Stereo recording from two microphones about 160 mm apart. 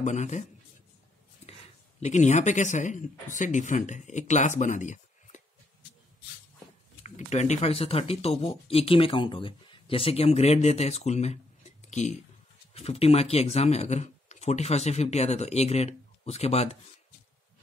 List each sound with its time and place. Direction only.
0.0 s speech: 45° left (ahead or behind)
2.0 s speech: 45° left (ahead or behind)
7.0 s speech: 45° left (ahead or behind)